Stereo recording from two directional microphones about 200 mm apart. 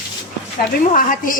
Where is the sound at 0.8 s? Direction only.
40° left (ahead or behind).